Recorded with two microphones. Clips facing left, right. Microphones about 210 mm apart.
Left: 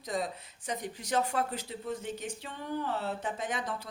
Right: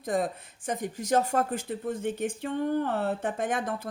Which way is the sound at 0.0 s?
50° right (ahead or behind).